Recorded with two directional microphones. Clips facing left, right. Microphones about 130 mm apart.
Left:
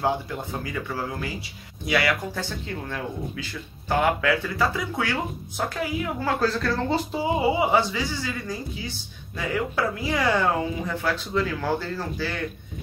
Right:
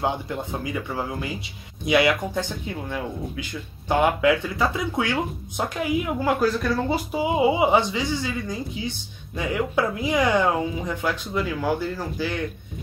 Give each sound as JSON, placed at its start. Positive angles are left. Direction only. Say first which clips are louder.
{"t": 0.0, "sound": "a man's voice", "louder": "even", "side_deg": -20}